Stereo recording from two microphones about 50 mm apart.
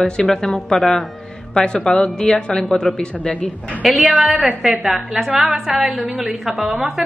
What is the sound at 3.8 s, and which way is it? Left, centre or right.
A woman's voice, centre.